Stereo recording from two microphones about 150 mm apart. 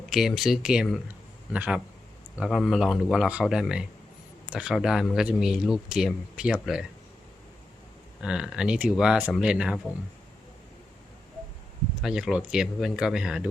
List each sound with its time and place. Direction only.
0.1 s a man's voice: centre (ahead or behind)
8.2 s speech: 5° right (ahead or behind)
12.0 s speech: 5° right (ahead or behind)